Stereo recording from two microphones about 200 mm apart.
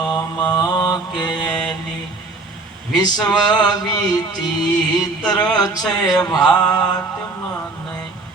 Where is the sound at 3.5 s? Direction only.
20° left (ahead or behind).